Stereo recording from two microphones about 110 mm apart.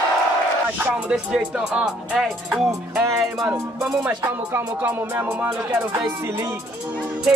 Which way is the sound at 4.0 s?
15° right (ahead or behind).